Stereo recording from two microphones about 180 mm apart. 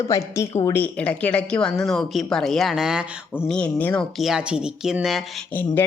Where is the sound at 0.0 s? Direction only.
15° left (ahead or behind); by 3.4 s 5° right (ahead or behind).